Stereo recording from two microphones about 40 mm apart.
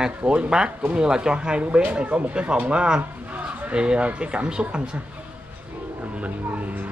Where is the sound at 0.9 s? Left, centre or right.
Centre.